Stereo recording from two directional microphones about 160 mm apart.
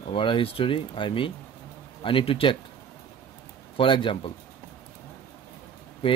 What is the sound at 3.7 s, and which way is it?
Speech, 30° left (ahead or behind).